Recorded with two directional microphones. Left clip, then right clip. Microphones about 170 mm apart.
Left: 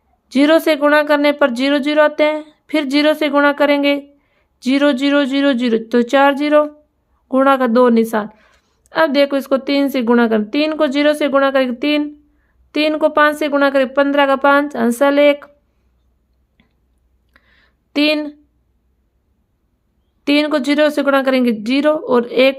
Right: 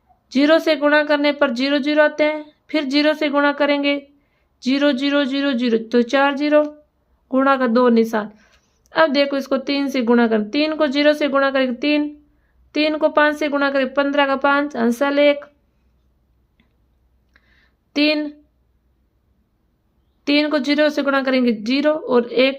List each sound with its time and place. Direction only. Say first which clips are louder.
0.3 s speech: left 3 dB; 25° left (ahead or behind)
16.6 s chewing: left 4 dB; 25° left (ahead or behind)
17.3 s a sound: left 4 dB; 25° left (ahead or behind)
20.2 s speech: left 3 dB; 25° left (ahead or behind)